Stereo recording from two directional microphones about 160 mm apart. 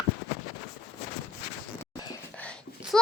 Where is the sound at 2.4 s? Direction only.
5° left (ahead or behind).